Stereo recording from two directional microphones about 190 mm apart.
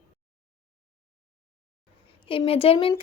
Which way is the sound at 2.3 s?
30° left (ahead or behind).